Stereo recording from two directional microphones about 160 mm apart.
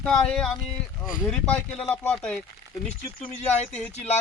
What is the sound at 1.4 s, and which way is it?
Speech, 10° left (ahead or behind).